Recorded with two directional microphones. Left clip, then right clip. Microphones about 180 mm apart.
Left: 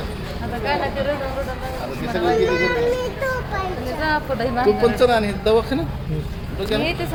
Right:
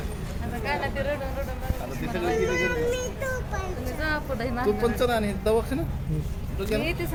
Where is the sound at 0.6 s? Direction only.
15° left (ahead or behind).